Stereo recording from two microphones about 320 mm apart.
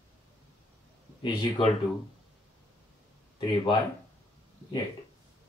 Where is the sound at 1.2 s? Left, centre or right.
Centre.